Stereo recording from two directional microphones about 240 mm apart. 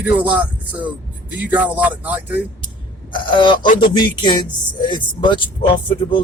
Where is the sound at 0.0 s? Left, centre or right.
Centre.